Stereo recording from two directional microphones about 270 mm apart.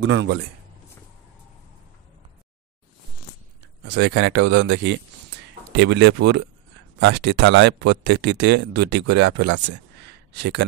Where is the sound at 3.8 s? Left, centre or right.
Right.